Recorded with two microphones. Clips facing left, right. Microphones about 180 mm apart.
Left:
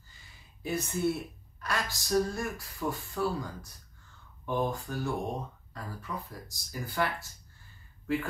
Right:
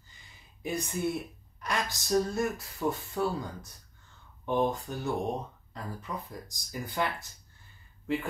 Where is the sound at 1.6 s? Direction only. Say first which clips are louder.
Right 2 dB; 20° right (ahead or behind).